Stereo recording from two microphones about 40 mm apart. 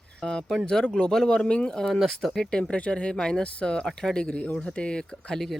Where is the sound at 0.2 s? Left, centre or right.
Centre.